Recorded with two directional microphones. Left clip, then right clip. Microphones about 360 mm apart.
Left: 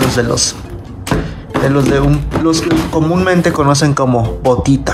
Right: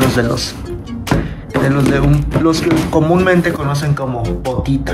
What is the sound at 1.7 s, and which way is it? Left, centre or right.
Speech, centre.